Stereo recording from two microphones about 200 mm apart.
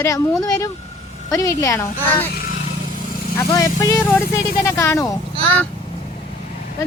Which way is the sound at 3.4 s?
15° left (ahead or behind).